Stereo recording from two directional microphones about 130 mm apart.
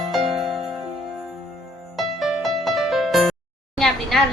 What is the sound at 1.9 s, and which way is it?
Music, centre (ahead or behind).